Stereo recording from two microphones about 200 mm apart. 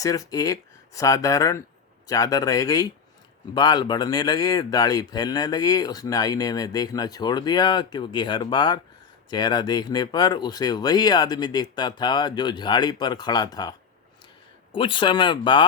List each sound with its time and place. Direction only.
0.0 s speech: 15° left (ahead or behind)